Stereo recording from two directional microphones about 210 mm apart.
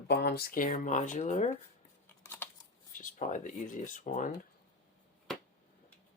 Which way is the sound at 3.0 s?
35° left (ahead or behind).